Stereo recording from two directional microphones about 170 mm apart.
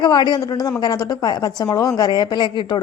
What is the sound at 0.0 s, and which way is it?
A woman's voice, 25° left (ahead or behind).